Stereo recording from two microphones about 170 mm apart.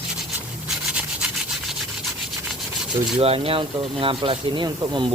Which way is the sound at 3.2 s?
35° right (ahead or behind).